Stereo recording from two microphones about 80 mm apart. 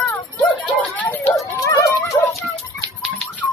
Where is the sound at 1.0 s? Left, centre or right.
Centre.